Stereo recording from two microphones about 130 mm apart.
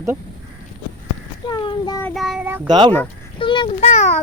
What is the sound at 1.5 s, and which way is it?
Child singing, 35° left (ahead or behind).